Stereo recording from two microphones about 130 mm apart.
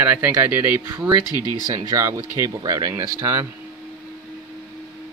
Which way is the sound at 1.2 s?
30° left (ahead or behind).